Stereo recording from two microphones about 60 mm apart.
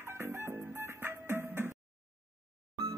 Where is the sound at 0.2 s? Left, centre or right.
Right.